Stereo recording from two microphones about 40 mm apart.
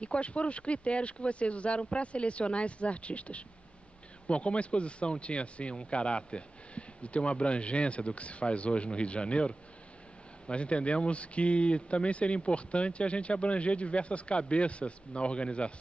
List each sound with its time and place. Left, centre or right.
0.0 s speech: left